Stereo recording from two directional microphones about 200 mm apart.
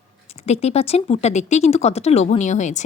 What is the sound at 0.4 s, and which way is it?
A woman's voice, 35° left (ahead or behind).